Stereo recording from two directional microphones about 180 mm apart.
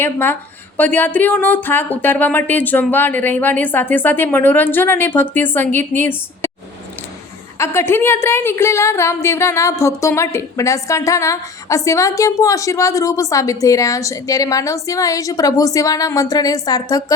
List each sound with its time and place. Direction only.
0.0 s a woman's voice: 10° left (ahead or behind)
7.6 s a woman's voice: 15° left (ahead or behind)